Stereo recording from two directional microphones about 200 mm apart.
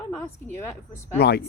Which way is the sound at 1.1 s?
55° left (ahead or behind).